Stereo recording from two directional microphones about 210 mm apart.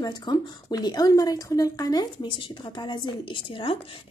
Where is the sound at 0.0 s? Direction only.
20° left (ahead or behind).